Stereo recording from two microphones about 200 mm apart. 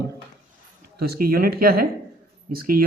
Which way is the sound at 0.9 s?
50° right (ahead or behind).